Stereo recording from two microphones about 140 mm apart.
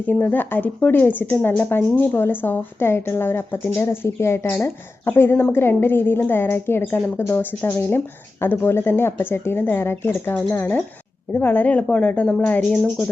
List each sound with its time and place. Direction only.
0.0 s speech: 10° left (ahead or behind)